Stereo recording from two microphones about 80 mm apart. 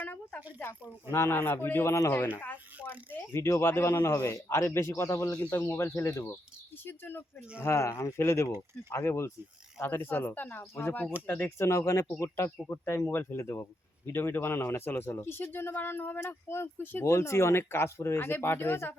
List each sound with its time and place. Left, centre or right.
0.0 s a sound: left
1.1 s speech: left
2.4 s a man's voice: left
5.5 s a man's voice: left
6.8 s a man's voice: left